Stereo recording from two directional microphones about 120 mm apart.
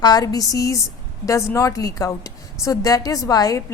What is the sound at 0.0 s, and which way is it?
A woman's voice, 35° left (ahead or behind).